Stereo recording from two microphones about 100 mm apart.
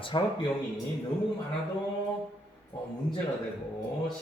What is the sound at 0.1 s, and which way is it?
Speech, 50° left (ahead or behind).